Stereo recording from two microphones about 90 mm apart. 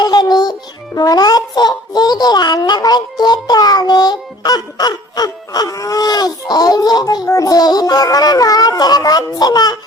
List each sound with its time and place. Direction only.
0.0 s music: 50° left (ahead or behind)
0.9 s a child's voice: 45° left (ahead or behind)